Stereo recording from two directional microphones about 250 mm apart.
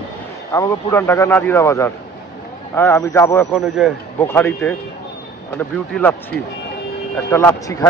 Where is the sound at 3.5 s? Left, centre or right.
Centre.